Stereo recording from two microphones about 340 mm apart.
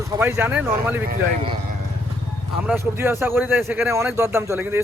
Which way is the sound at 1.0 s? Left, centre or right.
Right.